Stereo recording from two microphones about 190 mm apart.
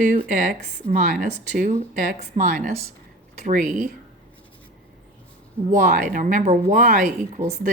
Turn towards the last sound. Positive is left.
turn(degrees=-45)  # may be behind; listen again after turning